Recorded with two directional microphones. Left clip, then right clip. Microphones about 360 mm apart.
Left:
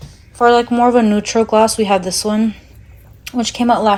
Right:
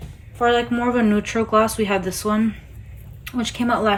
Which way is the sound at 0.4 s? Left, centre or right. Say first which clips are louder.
Left 8 dB; centre.